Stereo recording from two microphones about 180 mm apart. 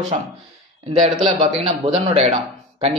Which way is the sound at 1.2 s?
35° right (ahead or behind).